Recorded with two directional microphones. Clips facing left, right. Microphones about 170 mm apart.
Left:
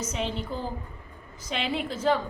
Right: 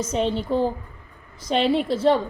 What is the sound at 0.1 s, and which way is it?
Speech, 30° right (ahead or behind).